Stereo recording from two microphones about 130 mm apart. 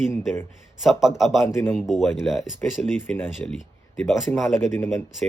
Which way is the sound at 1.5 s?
20° left (ahead or behind).